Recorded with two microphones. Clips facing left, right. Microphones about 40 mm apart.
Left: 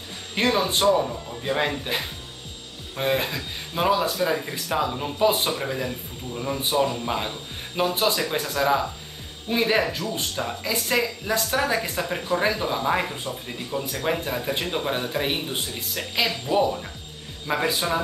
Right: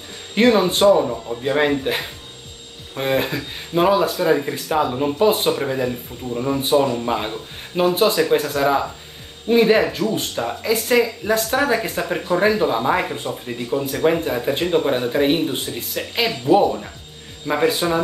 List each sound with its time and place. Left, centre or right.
0.4 s speech: centre